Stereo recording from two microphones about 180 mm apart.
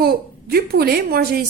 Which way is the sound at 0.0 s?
60° right (ahead or behind).